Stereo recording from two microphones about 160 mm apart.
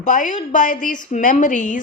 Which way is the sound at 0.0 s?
50° left (ahead or behind).